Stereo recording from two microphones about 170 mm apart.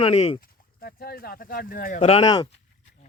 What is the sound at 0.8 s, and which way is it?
Speech, 65° left (ahead or behind).